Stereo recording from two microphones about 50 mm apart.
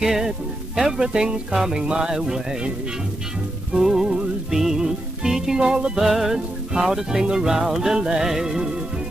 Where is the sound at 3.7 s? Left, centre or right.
Centre.